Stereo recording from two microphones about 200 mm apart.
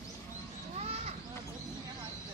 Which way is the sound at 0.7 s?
30° right (ahead or behind).